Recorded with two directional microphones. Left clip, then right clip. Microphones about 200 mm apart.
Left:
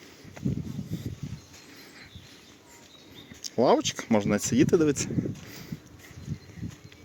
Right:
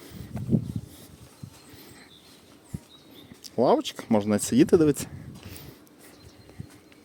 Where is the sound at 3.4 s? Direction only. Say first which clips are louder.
Even; 10° right (ahead or behind).